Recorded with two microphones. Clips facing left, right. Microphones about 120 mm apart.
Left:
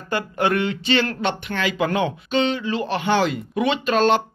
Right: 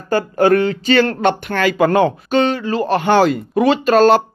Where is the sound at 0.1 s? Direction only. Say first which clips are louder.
Right 8 dB; 40° right (ahead or behind).